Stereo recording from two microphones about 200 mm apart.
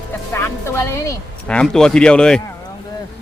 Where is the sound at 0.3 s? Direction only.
15° left (ahead or behind).